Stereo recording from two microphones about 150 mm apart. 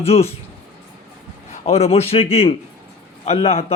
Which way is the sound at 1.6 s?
45° left (ahead or behind).